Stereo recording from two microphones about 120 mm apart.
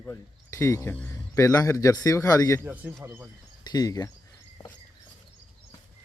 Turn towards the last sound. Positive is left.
turn(degrees=30)  # may be behind; listen again after turning